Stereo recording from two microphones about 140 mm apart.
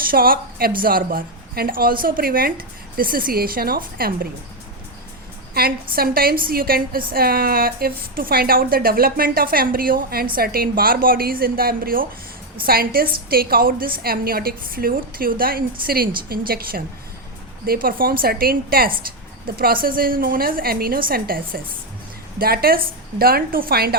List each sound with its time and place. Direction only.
0.0 s a woman's voice: 90° right
5.5 s a woman's voice: 90° right